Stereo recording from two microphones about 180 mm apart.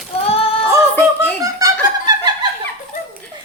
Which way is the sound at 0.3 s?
35° left (ahead or behind).